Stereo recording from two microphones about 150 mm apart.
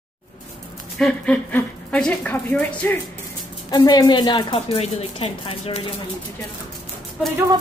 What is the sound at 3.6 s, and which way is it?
Speech, 25° left (ahead or behind).